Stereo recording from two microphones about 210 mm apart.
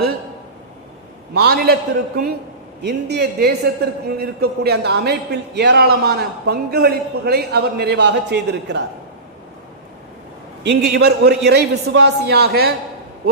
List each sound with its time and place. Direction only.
1.3 s speech: 50° right (ahead or behind)
10.6 s speech: 50° right (ahead or behind)